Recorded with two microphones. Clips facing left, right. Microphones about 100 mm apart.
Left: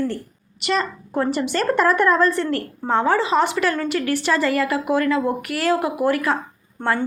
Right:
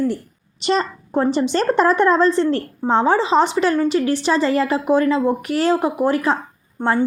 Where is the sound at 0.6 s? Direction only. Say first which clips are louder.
Right 3 dB; 30° right (ahead or behind).